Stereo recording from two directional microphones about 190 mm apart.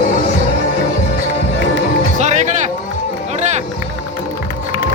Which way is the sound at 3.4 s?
35° right (ahead or behind).